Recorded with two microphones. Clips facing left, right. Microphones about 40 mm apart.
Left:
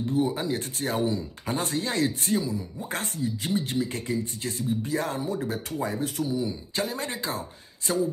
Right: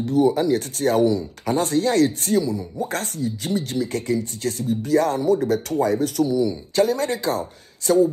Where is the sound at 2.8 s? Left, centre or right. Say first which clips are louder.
Right 5 dB; left.